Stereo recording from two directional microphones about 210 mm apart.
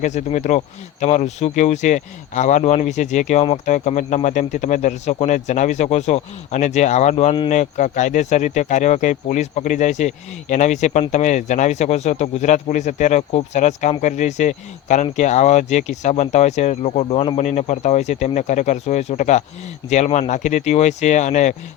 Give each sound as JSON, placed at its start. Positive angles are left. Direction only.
{"t": 0.0, "sound": "speech", "side_deg": 35}